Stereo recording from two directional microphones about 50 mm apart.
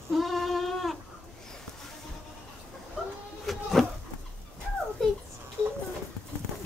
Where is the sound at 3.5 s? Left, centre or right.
Centre.